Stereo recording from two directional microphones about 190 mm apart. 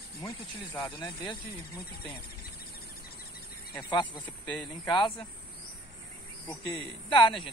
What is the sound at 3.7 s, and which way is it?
Speech, 25° left (ahead or behind).